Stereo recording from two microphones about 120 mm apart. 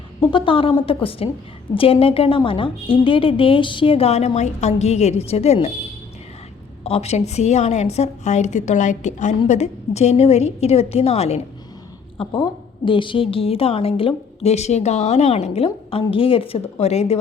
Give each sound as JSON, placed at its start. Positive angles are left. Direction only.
{"t": 0.3, "sound": "a woman's voice", "side_deg": 45}
{"t": 6.8, "sound": "a woman's voice", "side_deg": 60}
{"t": 9.5, "sound": "a woman's voice", "side_deg": 65}
{"t": 12.3, "sound": "a woman's voice", "side_deg": 45}